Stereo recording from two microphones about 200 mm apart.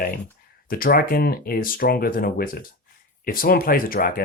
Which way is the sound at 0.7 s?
45° left (ahead or behind).